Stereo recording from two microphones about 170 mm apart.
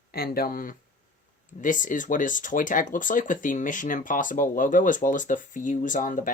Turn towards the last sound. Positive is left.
turn(degrees=50)  # may be behind; listen again after turning